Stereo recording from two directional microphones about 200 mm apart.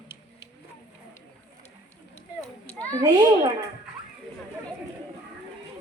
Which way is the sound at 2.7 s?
5° left (ahead or behind).